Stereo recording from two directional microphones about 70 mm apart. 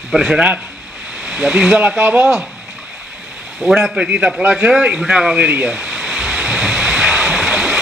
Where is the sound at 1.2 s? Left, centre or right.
Centre.